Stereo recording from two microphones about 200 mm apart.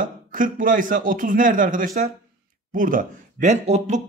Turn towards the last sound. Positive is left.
turn(degrees=-35)  # may be behind; listen again after turning